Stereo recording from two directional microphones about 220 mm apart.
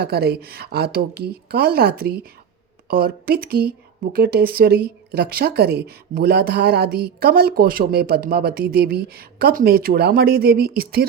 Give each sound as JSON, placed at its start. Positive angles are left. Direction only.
{"t": 0.0, "sound": "speech", "side_deg": -45}